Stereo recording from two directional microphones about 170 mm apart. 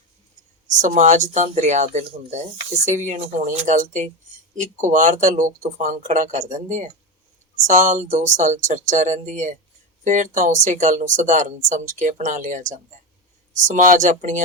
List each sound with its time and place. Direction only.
0.8 s speech: 45° right (ahead or behind)